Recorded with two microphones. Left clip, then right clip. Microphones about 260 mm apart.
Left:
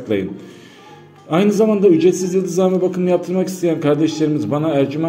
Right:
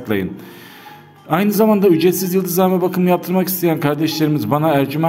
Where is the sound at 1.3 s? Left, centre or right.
Right.